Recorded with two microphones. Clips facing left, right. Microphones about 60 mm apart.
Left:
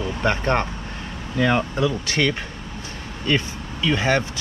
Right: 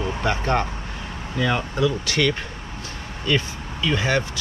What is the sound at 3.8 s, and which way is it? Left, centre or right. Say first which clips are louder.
Speech: left 1 dB; centre.